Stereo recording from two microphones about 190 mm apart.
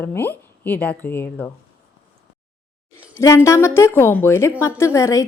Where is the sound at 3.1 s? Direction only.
15° left (ahead or behind).